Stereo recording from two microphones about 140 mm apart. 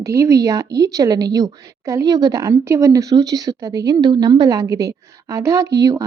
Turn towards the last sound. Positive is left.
turn(degrees=-25)  # may be behind; listen again after turning